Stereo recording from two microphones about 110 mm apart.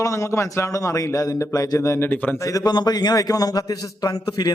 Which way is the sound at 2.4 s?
35° left (ahead or behind).